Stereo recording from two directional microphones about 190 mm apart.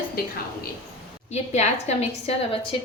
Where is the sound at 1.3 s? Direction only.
35° left (ahead or behind).